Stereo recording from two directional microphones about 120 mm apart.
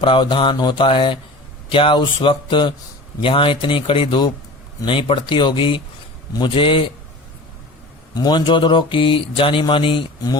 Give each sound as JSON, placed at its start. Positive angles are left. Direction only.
{"t": 0.0, "sound": "mantra", "side_deg": 45}
{"t": 8.1, "sound": "mantra", "side_deg": 35}